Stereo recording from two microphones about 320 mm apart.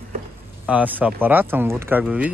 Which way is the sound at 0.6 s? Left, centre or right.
Centre.